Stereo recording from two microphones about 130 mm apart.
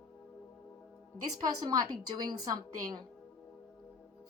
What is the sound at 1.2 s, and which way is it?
A woman's voice, 30° right (ahead or behind).